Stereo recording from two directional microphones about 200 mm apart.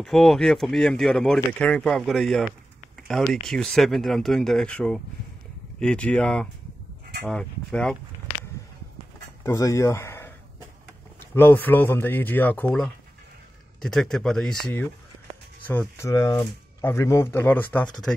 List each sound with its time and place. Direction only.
0.0 s speech: centre (ahead or behind)
9.4 s speech: 15° left (ahead or behind)
16.0 s speech: 15° left (ahead or behind)